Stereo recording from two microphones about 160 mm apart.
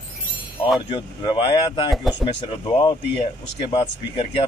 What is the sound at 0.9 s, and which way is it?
Speech, 30° left (ahead or behind).